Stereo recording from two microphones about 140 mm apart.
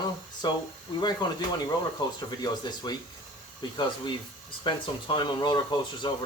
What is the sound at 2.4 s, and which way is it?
Speech, 30° left (ahead or behind).